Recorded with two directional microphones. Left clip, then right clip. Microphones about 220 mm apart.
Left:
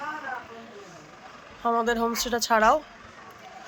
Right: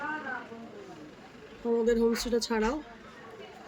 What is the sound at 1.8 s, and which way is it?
Speech, centre (ahead or behind).